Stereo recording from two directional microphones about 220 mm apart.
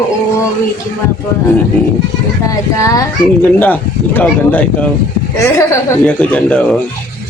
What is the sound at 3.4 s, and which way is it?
Speech, 10° left (ahead or behind).